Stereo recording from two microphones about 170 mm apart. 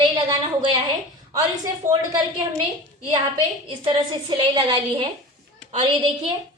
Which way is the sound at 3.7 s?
30° right (ahead or behind).